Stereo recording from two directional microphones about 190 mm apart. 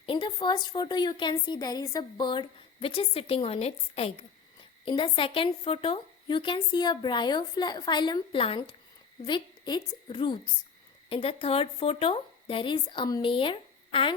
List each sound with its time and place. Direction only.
0.0 s a woman's voice: 25° left (ahead or behind)